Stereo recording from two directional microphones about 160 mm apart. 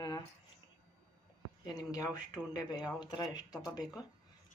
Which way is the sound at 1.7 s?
20° left (ahead or behind).